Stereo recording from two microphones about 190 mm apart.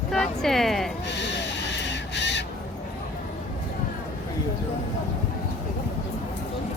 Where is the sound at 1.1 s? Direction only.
65° left (ahead or behind).